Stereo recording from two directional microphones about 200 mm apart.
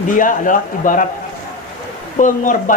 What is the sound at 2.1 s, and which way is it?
Speech, 40° left (ahead or behind).